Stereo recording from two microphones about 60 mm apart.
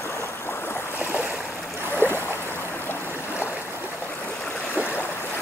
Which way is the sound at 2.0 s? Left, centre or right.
Left.